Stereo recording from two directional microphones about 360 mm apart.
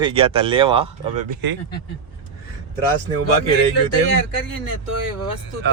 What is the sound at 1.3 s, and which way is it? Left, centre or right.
Speech, right.